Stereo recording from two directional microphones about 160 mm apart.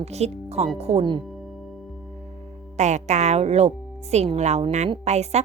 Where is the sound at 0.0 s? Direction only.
40° right (ahead or behind).